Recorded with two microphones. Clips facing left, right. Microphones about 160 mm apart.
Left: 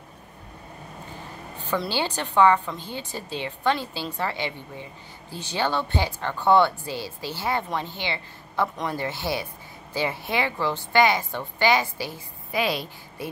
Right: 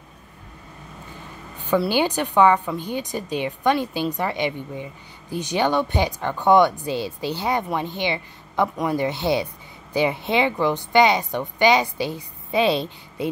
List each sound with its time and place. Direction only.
1.6 s a woman's voice: 10° right (ahead or behind)